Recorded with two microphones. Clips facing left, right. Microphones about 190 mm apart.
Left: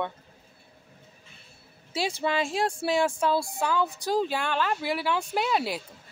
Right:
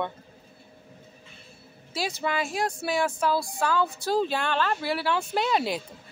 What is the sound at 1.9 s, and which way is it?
Speech, 25° left (ahead or behind).